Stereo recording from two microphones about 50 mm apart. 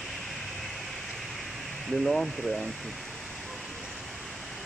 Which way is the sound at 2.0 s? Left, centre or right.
Centre.